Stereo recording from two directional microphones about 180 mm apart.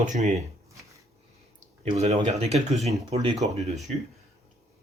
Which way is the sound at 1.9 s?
40° right (ahead or behind).